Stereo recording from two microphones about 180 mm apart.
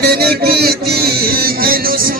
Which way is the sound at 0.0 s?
60° right (ahead or behind).